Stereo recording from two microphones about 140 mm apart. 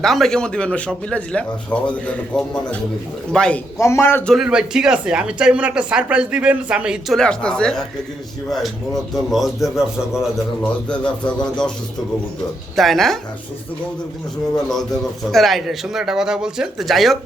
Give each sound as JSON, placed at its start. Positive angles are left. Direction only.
{"t": 0.0, "sound": "speech", "side_deg": 0}
{"t": 3.8, "sound": "a man's voice", "side_deg": 20}
{"t": 4.3, "sound": "speech", "side_deg": -5}
{"t": 12.7, "sound": "speech", "side_deg": 0}
{"t": 15.3, "sound": "speech", "side_deg": 0}